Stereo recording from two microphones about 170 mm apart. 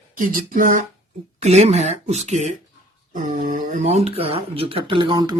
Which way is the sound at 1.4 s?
40° right (ahead or behind).